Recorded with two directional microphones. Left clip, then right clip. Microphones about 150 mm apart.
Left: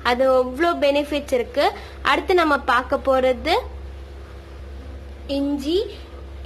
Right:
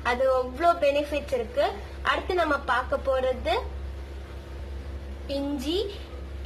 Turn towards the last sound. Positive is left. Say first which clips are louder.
# left 7 dB
turn(degrees=30)  # may be behind; listen again after turning